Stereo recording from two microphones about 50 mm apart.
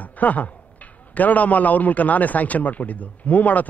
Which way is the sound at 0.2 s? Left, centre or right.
Left.